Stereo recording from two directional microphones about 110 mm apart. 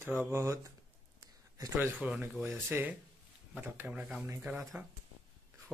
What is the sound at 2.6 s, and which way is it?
Speech, 20° right (ahead or behind).